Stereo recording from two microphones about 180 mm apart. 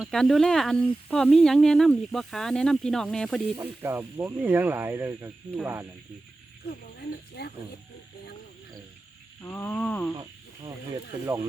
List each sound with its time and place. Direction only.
0.0 s speech: centre (ahead or behind)
3.6 s speech: 10° right (ahead or behind)
7.4 s speech: 65° left (ahead or behind)
9.4 s a sound: 10° left (ahead or behind)